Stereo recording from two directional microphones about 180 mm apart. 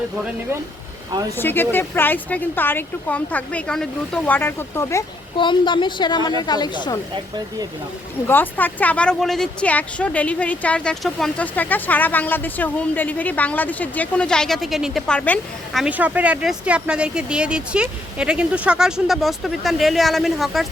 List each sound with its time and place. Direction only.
1.4 s speech: 10° left (ahead or behind)
5.4 s a woman's voice: 25° left (ahead or behind)
8.3 s speech: 10° left (ahead or behind)
15.8 s speech: 10° right (ahead or behind)